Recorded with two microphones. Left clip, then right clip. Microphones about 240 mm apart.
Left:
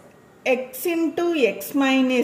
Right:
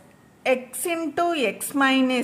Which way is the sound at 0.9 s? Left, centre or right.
Right.